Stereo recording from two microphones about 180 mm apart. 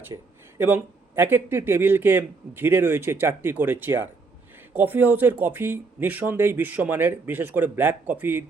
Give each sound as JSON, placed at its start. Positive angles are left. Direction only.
{"t": 0.1, "sound": "speech", "side_deg": -20}